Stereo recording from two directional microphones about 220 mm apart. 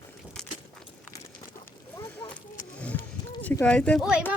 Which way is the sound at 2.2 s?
20° left (ahead or behind).